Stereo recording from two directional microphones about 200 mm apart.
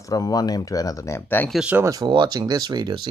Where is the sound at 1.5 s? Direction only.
5° right (ahead or behind); by 3.1 s 20° right (ahead or behind).